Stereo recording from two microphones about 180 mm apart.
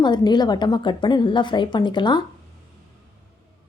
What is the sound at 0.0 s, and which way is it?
A woman's voice, 25° left (ahead or behind).